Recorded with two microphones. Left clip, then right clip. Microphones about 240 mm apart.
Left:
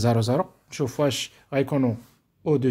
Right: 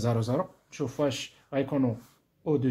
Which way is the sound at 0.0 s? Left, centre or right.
Left.